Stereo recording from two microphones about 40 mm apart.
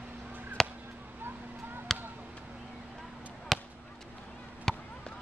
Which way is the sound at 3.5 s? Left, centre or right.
Centre.